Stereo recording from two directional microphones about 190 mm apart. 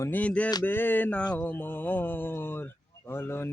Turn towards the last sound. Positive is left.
turn(degrees=10)  # may be behind; listen again after turning